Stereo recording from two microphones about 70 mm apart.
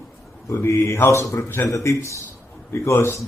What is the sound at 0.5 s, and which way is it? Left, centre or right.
A man's voice, left.